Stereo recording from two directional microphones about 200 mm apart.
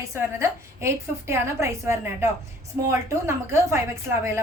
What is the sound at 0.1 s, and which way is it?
A woman's voice, 15° right (ahead or behind).